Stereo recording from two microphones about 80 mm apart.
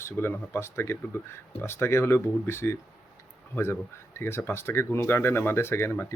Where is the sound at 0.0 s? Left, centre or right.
Left.